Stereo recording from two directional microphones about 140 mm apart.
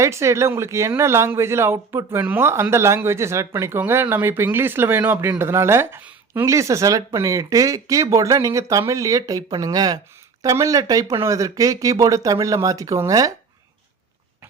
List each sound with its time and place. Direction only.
0.0 s speech: 20° right (ahead or behind)